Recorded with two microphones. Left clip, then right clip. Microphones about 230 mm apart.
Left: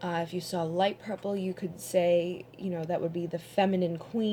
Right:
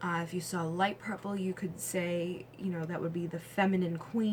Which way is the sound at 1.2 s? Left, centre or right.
Centre.